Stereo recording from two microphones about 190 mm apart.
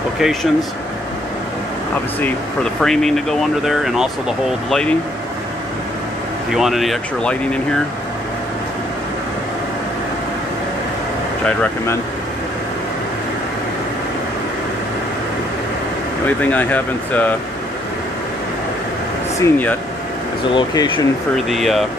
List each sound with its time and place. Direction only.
0.2 s speech: centre (ahead or behind)
2.1 s speech: 5° left (ahead or behind)
6.5 s speech: centre (ahead or behind)
11.4 s speech: 15° left (ahead or behind)
16.3 s speech: 10° left (ahead or behind)
19.4 s speech: 10° left (ahead or behind)
20.5 s speech: 25° left (ahead or behind)
21.5 s speech: centre (ahead or behind)